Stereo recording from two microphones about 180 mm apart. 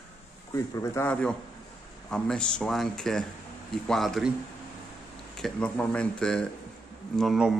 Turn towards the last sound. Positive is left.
turn(degrees=0)  # may be behind; listen again after turning